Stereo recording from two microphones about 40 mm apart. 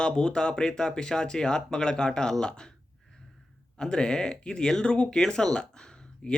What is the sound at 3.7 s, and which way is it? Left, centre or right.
Speech, centre.